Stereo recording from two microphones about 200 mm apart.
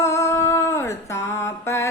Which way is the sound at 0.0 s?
15° left (ahead or behind).